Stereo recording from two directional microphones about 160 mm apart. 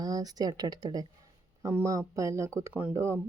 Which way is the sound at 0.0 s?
25° right (ahead or behind).